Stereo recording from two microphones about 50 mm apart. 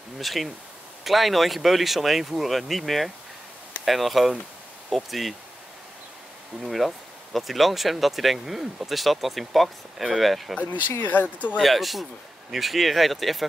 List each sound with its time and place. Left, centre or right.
0.2 s speech: centre
6.6 s speech: centre
10.6 s speech: left
11.5 s speech: centre